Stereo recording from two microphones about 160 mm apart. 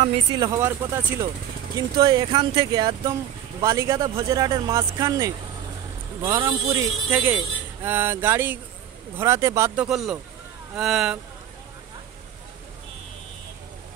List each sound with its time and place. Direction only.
0.0 s speech: 35° right (ahead or behind)
9.8 s speech: centre (ahead or behind)